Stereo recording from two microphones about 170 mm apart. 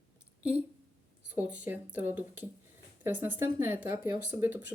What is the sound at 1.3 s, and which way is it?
Speech, 10° right (ahead or behind).